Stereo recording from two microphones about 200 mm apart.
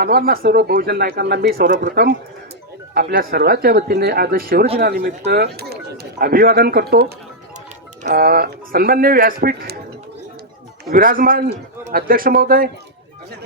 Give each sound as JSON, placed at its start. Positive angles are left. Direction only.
{"t": 0.0, "sound": "speech", "side_deg": -50}
{"t": 10.8, "sound": "speech", "side_deg": -45}